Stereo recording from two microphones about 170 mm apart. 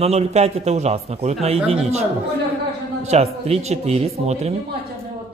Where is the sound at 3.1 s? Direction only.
40° right (ahead or behind).